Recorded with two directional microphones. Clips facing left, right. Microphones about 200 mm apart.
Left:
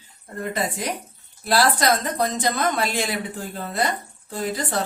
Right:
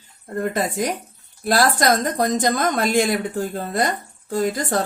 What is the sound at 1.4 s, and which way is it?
Speech, 50° right (ahead or behind).